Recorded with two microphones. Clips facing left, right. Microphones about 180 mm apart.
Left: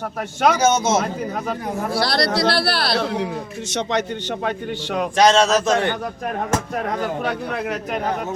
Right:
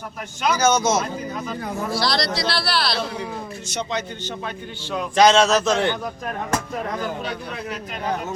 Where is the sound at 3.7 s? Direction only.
85° left.